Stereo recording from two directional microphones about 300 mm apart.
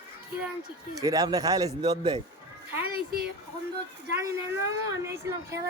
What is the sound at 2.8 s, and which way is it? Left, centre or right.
Speech, right.